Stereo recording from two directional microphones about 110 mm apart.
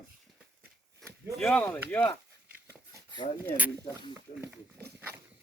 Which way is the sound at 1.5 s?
15° left (ahead or behind).